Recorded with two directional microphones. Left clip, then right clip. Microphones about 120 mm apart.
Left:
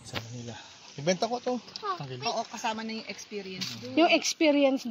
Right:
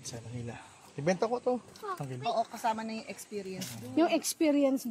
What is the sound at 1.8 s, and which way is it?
Speech, 55° left (ahead or behind).